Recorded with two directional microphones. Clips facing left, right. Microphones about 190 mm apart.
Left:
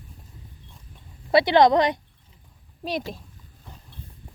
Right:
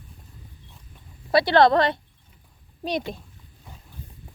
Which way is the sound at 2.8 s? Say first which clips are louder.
Right 2 dB; 5° left (ahead or behind).